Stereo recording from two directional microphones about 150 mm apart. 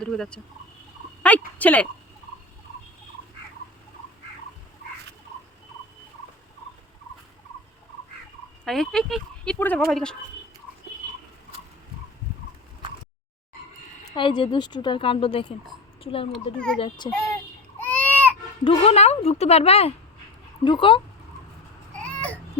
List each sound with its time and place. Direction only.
0.0 s speech: 5° left (ahead or behind)
8.6 s speech: centre (ahead or behind)
14.2 s a woman's voice: 35° left (ahead or behind)
16.3 s speech: 5° left (ahead or behind)
17.0 s child singing: 30° left (ahead or behind)
17.7 s baby cry: 10° left (ahead or behind)
18.6 s a woman's voice: 40° left (ahead or behind)
21.9 s baby cry: 10° left (ahead or behind)